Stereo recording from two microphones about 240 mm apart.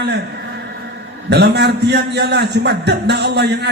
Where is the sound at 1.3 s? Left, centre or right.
Right.